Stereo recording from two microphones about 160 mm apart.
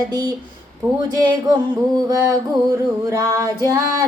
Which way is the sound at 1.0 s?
25° right (ahead or behind).